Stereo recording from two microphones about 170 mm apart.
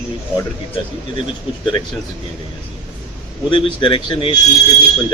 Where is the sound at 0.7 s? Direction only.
30° left (ahead or behind).